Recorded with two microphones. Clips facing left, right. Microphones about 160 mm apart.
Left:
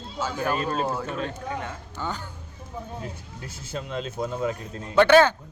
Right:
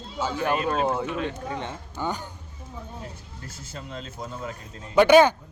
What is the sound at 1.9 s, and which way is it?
Speech, 15° right (ahead or behind).